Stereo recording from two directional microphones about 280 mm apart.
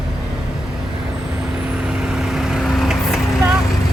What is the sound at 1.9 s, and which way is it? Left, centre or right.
Vehicle, centre.